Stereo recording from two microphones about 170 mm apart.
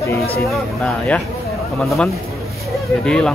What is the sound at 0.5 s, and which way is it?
Speech, 5° left (ahead or behind).